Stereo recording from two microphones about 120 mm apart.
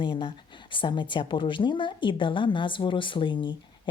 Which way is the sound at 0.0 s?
45° left (ahead or behind).